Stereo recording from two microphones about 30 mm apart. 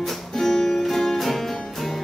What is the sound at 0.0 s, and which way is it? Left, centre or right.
Music, centre.